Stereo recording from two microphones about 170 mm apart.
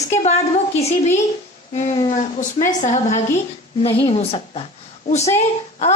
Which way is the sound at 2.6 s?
45° left (ahead or behind).